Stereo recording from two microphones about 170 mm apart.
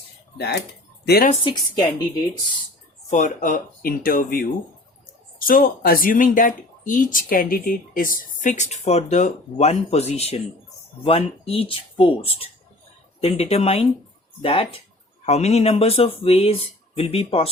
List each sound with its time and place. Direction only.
1.0 s speech: 65° left (ahead or behind)
1.5 s a woman's voice: 25° left (ahead or behind)
3.1 s speech: 45° left (ahead or behind)
5.5 s speech: 55° left (ahead or behind); by 17.5 s 35° left (ahead or behind)